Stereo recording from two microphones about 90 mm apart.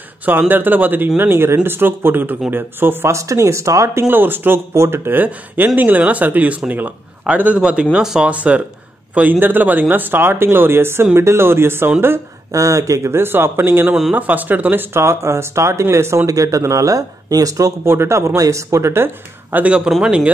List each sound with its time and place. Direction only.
0.2 s speech: 20° right (ahead or behind)
4.1 s speech: 20° right (ahead or behind)
12.4 s speech: 40° right (ahead or behind)
13.8 s speech: 5° right (ahead or behind)
14.1 s speech: 20° right (ahead or behind)